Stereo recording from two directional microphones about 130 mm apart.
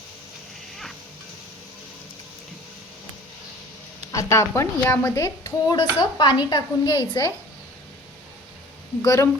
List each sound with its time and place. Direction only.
4.1 s a woman's voice: 25° left (ahead or behind)
5.7 s speech: 35° left (ahead or behind)
9.0 s a woman's voice: 20° left (ahead or behind)